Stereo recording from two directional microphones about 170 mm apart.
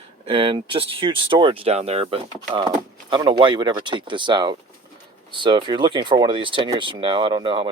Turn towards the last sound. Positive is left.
turn(degrees=-30)  # may be behind; listen again after turning